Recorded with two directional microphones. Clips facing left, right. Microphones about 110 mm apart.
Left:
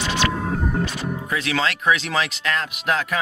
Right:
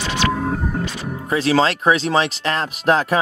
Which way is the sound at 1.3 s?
35° right (ahead or behind).